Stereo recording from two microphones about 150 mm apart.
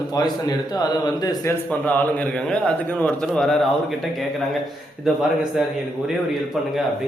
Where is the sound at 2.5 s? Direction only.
5° left (ahead or behind).